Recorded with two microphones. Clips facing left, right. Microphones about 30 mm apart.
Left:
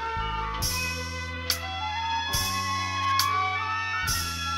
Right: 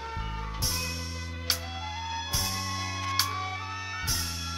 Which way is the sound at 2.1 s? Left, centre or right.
Left.